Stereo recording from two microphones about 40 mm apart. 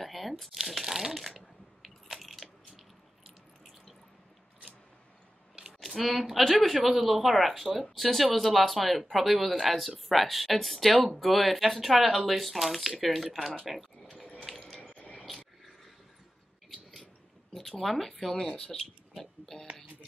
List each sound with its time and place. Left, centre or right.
0.0 s shuffling cards: centre
2.1 s biting: centre
5.8 s a sound: centre
6.3 s speech: centre
14.0 s sink: left
14.8 s a sound: left
17.6 s speech: centre
18.4 s speech: centre